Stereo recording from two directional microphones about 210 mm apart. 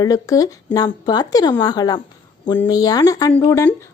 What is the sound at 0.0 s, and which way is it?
A woman's voice, 15° left (ahead or behind).